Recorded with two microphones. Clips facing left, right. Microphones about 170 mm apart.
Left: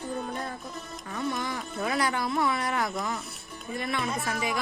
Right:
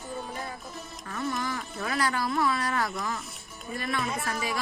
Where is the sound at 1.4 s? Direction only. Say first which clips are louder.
Left 1 dB; 20° left (ahead or behind).